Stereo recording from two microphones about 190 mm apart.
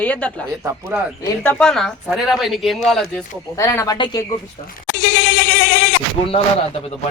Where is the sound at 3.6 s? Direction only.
15° left (ahead or behind).